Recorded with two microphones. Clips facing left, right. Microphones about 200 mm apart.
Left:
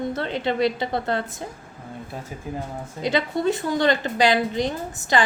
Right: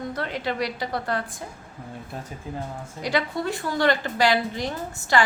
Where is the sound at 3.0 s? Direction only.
25° left (ahead or behind).